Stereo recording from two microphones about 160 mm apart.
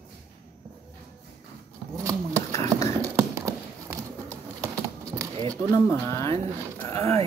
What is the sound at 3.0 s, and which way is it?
Clip-clop, 20° right (ahead or behind).